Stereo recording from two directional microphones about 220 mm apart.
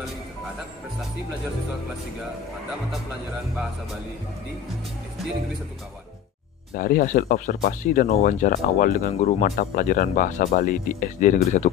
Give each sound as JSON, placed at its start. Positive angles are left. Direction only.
{"t": 6.7, "sound": "speech", "side_deg": 40}